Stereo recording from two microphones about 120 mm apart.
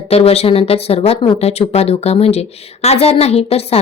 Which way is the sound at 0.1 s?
60° left (ahead or behind).